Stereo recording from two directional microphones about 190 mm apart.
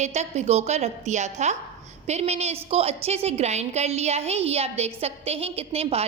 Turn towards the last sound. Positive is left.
turn(degrees=-30)  # may be behind; listen again after turning